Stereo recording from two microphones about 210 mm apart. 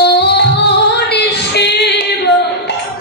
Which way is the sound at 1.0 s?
50° left (ahead or behind).